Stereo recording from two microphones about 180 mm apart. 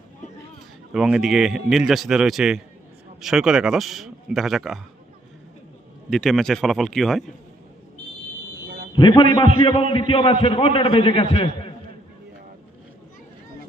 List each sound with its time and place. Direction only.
0.9 s a man's voice: 5° right (ahead or behind)
6.1 s a man's voice: 5° left (ahead or behind)
9.0 s a man's voice: 25° left (ahead or behind)